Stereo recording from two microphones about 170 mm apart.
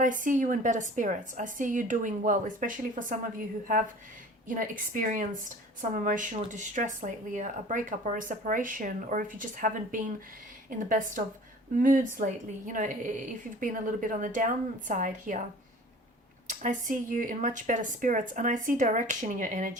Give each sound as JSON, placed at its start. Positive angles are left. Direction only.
{"t": 0.0, "sound": "speech", "side_deg": -50}
{"t": 4.4, "sound": "speech", "side_deg": -50}
{"t": 16.5, "sound": "speech", "side_deg": -50}